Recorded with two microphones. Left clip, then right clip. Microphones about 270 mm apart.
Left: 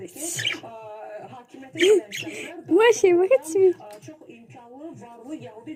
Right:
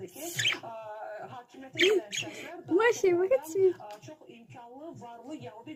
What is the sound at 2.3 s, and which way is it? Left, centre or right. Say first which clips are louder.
A woman's voice: left 9 dB; centre.